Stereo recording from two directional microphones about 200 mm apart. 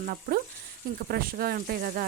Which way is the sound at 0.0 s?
45° right (ahead or behind).